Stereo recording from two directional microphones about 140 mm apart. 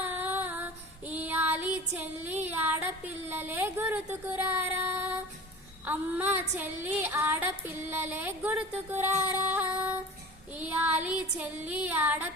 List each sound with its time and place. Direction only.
0.0 s child singing: 15° right (ahead or behind)
5.8 s female singing: 15° right (ahead or behind)